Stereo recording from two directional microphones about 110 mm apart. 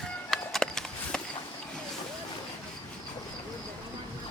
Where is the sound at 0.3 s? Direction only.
5° left (ahead or behind).